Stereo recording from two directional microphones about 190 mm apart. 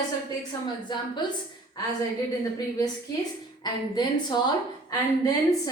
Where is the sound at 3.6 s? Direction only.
20° left (ahead or behind).